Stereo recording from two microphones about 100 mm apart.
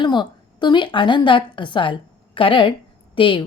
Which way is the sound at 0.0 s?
50° left (ahead or behind).